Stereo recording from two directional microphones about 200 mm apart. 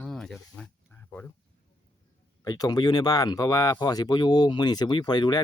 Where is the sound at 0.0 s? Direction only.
5° left (ahead or behind).